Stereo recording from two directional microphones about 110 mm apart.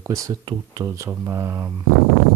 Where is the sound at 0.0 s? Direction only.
30° right (ahead or behind).